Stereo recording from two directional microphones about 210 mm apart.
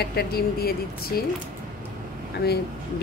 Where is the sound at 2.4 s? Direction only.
45° left (ahead or behind).